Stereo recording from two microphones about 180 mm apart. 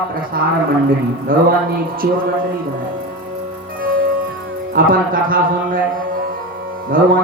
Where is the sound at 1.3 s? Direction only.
55° right (ahead or behind).